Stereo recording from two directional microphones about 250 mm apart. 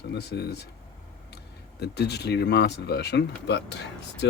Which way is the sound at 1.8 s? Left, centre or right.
Left.